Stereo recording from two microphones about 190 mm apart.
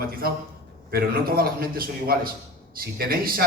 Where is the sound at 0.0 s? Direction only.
50° right (ahead or behind).